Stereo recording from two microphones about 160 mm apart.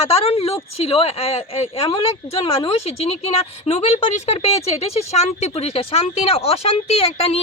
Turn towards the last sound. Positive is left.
turn(degrees=40)  # may be behind; listen again after turning